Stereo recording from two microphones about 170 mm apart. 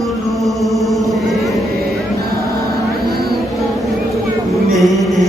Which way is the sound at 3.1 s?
65° right (ahead or behind).